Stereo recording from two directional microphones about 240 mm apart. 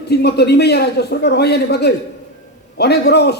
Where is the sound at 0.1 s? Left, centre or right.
Left.